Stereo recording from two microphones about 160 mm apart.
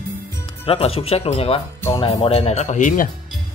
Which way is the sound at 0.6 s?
35° left (ahead or behind).